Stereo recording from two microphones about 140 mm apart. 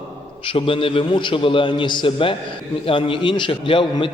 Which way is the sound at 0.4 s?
40° left (ahead or behind).